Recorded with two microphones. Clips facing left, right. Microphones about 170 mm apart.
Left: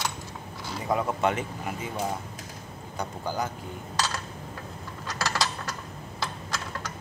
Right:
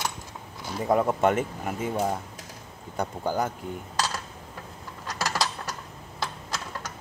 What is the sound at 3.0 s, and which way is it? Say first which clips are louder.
Speech: right 4 dB; 50° right (ahead or behind).